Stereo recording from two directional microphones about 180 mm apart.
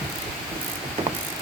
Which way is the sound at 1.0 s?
35° right (ahead or behind).